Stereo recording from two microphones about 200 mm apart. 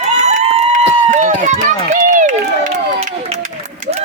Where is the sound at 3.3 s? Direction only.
35° right (ahead or behind).